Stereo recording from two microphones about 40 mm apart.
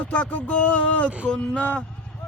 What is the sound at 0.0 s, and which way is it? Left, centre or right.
Speech, left.